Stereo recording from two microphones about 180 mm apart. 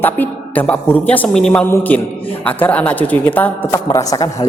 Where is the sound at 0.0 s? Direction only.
10° left (ahead or behind).